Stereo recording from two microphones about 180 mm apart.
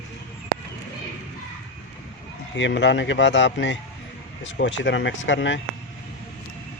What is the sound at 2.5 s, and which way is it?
Speech, 80° left.